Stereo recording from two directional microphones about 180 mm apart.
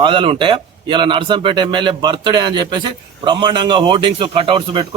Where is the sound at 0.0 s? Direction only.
30° right (ahead or behind).